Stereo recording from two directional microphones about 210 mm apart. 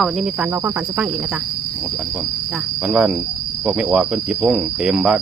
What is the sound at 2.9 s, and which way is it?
Cricket, 5° right (ahead or behind).